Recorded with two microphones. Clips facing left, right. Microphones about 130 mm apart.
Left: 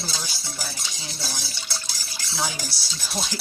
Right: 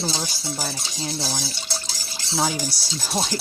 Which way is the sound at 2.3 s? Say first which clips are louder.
Right 6 dB; 40° right (ahead or behind).